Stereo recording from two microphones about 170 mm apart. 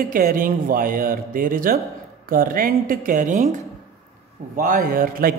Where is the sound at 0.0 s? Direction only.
55° right (ahead or behind).